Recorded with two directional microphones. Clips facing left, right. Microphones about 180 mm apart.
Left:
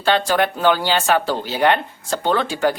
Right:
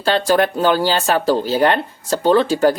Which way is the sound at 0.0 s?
40° right (ahead or behind).